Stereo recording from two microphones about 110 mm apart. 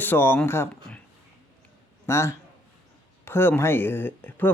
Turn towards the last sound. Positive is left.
turn(degrees=15)  # may be behind; listen again after turning